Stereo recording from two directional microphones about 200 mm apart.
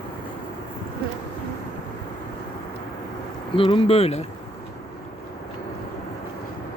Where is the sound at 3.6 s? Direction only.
30° left (ahead or behind).